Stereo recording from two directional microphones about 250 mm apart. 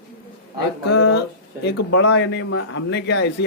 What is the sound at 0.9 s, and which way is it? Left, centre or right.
A man's voice, left.